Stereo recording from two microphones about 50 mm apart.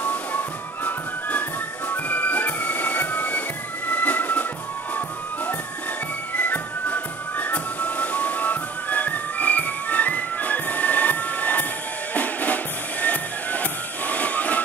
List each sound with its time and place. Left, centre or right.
0.0 s music: left
1.9 s train: left
3.9 s music: left
12.1 s drum: left
13.0 s music: left